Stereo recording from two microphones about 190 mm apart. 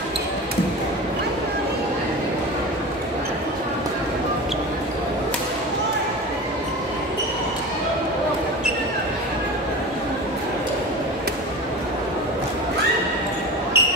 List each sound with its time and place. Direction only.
13.7 s basketball bounce: 60° right (ahead or behind)